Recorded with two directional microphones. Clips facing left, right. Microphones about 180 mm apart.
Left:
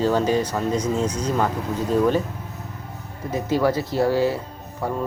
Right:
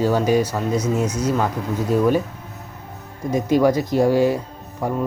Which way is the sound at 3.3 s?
15° right (ahead or behind).